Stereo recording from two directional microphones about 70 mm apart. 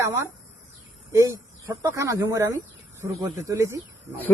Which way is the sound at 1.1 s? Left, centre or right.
Right.